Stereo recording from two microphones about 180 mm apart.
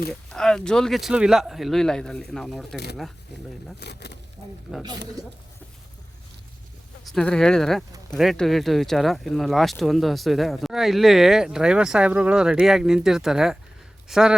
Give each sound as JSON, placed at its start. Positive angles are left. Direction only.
{"t": 0.1, "sound": "speech", "side_deg": 5}
{"t": 3.8, "sound": "speech", "side_deg": 65}
{"t": 7.0, "sound": "speech", "side_deg": 0}